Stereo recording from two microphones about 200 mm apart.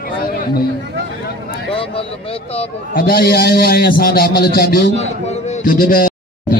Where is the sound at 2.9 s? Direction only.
50° left (ahead or behind).